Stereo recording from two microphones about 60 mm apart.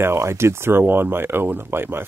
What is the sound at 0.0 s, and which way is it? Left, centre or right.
Speech, right.